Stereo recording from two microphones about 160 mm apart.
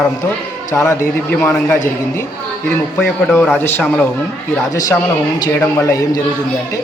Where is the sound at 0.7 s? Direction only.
20° left (ahead or behind).